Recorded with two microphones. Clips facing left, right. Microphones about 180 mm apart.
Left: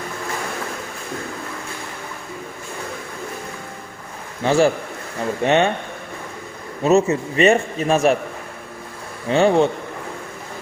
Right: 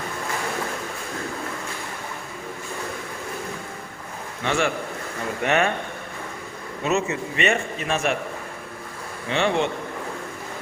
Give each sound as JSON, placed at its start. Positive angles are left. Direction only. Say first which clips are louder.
{"t": 4.4, "sound": "a man's voice", "louder": "left 7 dB", "side_deg": 35}
{"t": 6.8, "sound": "a man's voice", "louder": "left 8 dB", "side_deg": 40}
{"t": 9.3, "sound": "a man's voice", "louder": "left 7 dB", "side_deg": 40}